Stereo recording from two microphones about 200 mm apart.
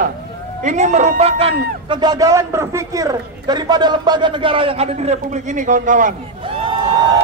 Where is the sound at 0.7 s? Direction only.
35° right (ahead or behind).